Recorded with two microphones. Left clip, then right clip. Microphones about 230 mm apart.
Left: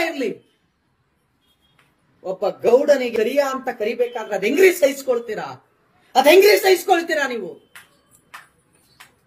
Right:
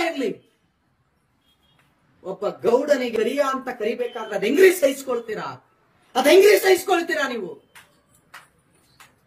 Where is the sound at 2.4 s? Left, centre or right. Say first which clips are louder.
Left 4 dB; centre.